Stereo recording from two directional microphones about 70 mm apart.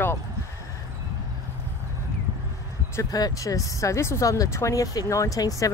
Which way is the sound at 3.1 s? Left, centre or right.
Left.